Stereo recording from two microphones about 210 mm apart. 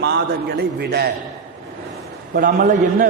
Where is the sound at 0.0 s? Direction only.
50° right (ahead or behind).